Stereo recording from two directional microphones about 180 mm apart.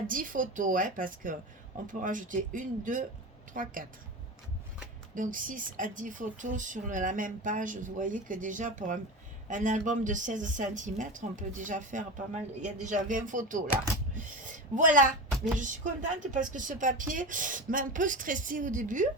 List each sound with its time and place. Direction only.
0.1 s speech: 50° right (ahead or behind)
5.1 s speech: 45° right (ahead or behind)
14.4 s a sound: 45° right (ahead or behind)
15.5 s speech: 45° right (ahead or behind)